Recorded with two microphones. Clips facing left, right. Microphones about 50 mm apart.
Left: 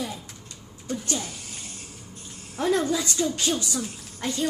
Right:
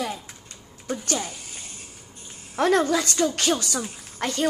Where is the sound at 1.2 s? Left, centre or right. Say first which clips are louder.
Right 2 dB; centre.